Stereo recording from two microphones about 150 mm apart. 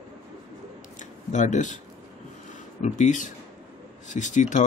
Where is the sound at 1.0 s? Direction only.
55° left (ahead or behind).